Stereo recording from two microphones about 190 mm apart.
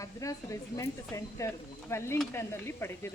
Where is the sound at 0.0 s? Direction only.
15° left (ahead or behind).